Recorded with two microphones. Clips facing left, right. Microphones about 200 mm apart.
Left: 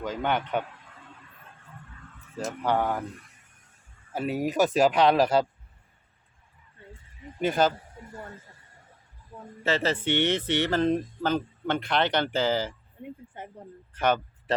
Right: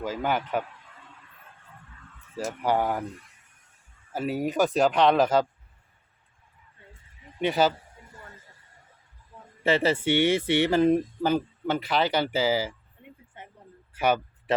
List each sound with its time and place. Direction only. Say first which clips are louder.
0.0 s speech: even; 5° right (ahead or behind)
2.3 s speech: right 1 dB; 10° right (ahead or behind)
4.1 s speech: even; centre (ahead or behind)
7.4 s speech: right 1 dB; centre (ahead or behind)
9.3 s a sound: left 6 dB; 40° left (ahead or behind)
9.6 s speech: right 3 dB; 15° right (ahead or behind)
13.9 s a sound: right 1 dB; 10° right (ahead or behind)